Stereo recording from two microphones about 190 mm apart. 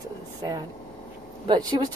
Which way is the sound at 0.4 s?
20° right (ahead or behind).